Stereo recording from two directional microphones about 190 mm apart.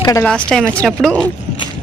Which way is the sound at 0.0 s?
15° left (ahead or behind).